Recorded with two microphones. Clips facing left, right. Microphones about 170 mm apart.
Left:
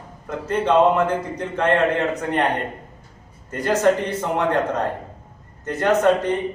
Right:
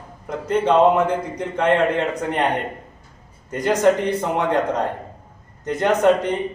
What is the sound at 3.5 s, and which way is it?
A man's voice, 15° right (ahead or behind).